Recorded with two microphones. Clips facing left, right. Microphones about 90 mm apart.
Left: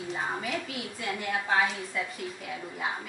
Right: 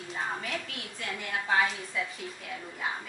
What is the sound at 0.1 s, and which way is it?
A woman's voice, 5° left (ahead or behind).